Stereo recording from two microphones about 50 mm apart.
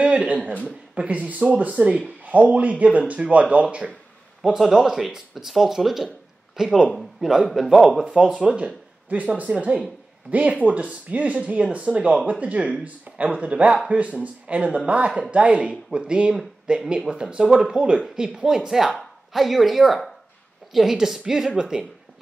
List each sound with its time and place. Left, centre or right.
0.0 s a sound: right
0.7 s speech: right
4.4 s speech: centre
8.4 s speech: right